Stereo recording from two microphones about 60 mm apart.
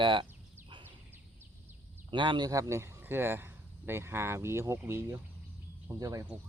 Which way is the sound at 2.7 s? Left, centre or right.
Right.